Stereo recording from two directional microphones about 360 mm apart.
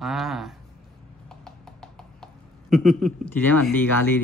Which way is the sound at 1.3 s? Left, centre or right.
Centre.